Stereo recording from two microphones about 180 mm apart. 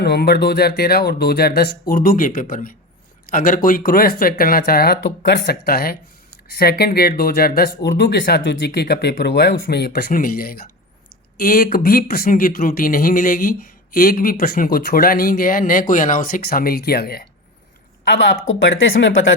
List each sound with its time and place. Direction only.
0.0 s speech: 65° left (ahead or behind)
18.1 s speech: 90° left